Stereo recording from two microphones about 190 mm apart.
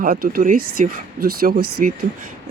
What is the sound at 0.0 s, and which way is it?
Speech, 50° right (ahead or behind).